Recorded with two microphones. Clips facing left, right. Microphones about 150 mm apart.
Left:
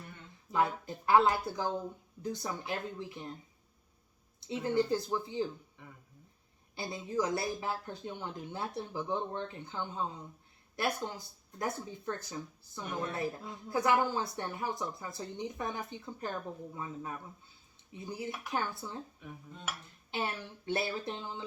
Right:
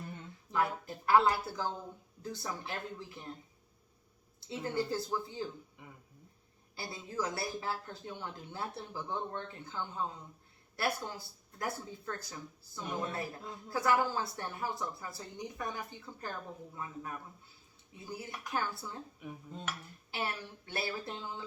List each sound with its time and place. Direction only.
0.5 s speech: 20° left (ahead or behind)
4.6 s speech: 20° left (ahead or behind)
6.7 s speech: 20° left (ahead or behind)
20.1 s speech: 20° left (ahead or behind)